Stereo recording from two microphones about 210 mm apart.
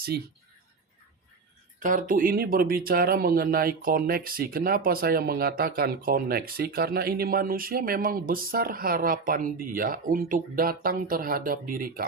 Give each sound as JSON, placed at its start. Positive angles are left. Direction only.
{"t": 1.8, "sound": "speech", "side_deg": -40}